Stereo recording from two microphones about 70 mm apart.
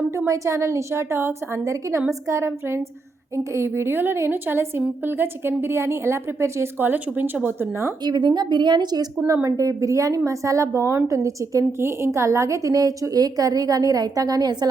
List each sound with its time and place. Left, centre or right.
0.3 s a woman's voice: right
8.0 s a woman's voice: right
9.2 s a woman's voice: right
11.8 s a woman's voice: right